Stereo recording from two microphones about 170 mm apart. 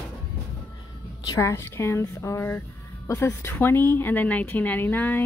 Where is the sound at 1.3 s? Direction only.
15° left (ahead or behind).